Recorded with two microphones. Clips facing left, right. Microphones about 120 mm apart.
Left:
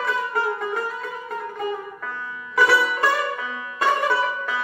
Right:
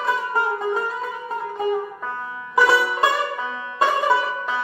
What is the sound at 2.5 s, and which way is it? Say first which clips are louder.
Music: right 2 dB; 20° right (ahead or behind).